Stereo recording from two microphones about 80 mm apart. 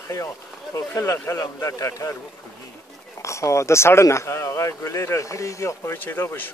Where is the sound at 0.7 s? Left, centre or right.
Left.